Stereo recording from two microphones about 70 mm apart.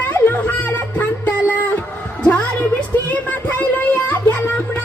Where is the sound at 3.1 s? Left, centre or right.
Left.